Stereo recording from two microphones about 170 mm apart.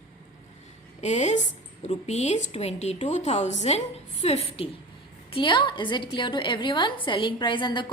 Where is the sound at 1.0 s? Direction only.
40° left (ahead or behind).